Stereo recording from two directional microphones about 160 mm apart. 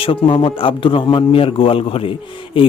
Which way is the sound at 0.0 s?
35° left (ahead or behind).